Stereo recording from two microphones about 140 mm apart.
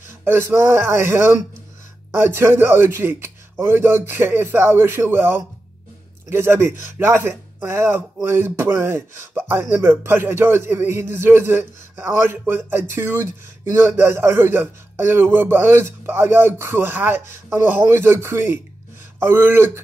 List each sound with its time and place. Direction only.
0.2 s speech: 15° right (ahead or behind)